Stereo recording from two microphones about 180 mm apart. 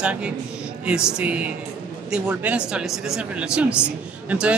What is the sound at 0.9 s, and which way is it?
Music, 5° right (ahead or behind).